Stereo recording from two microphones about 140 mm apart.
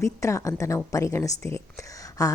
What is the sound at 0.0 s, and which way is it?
Speech, 20° left (ahead or behind).